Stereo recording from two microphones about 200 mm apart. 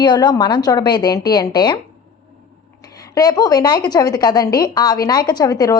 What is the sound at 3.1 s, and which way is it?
A woman's voice, 20° left (ahead or behind).